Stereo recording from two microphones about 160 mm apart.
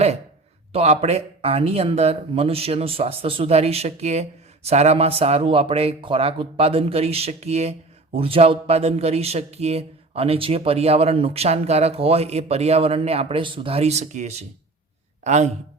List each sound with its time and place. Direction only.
0.7 s a man's voice: 40° right (ahead or behind)